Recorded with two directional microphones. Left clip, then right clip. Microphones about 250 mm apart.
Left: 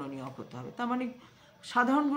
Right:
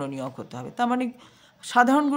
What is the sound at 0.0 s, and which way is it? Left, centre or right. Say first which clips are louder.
Speech: right 8 dB; right.